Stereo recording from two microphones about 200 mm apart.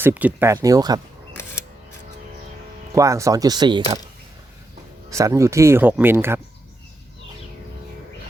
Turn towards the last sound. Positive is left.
turn(degrees=-10)  # may be behind; listen again after turning